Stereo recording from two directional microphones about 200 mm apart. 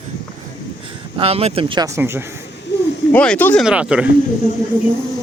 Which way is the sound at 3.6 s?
5° right (ahead or behind).